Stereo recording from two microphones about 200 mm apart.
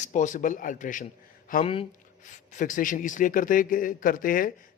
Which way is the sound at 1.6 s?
30° left (ahead or behind).